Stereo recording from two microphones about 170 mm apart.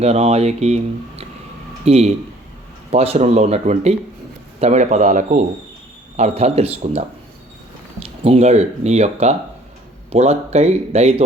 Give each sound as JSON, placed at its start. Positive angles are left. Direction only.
{"t": 0.0, "sound": "speech", "side_deg": -35}
{"t": 8.0, "sound": "speech", "side_deg": -35}